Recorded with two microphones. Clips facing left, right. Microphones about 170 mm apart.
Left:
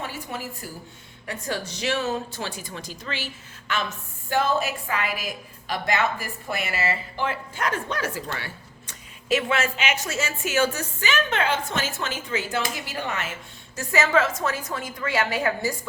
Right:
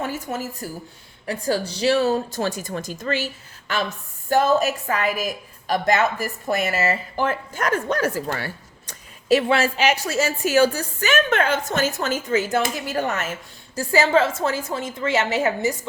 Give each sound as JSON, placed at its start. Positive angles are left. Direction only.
{"t": 0.0, "sound": "a sound", "side_deg": -45}
{"t": 1.3, "sound": "a woman's voice", "side_deg": -35}
{"t": 11.0, "sound": "speech", "side_deg": -50}
{"t": 13.7, "sound": "a woman's voice", "side_deg": -30}